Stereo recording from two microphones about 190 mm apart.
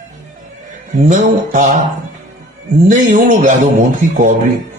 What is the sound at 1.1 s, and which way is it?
Speech, 45° right (ahead or behind).